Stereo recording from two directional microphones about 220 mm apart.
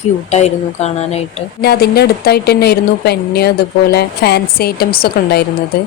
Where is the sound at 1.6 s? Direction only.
45° left (ahead or behind).